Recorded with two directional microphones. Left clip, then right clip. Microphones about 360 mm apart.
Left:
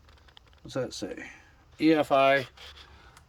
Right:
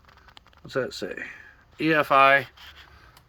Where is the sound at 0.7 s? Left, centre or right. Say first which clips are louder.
Right 4 dB; centre.